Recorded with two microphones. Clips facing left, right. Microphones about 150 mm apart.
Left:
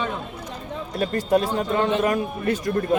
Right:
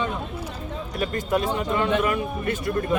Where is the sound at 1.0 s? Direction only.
35° left (ahead or behind).